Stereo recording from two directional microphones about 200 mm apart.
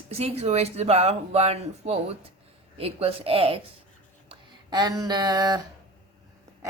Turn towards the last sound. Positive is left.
turn(degrees=-20)  # may be behind; listen again after turning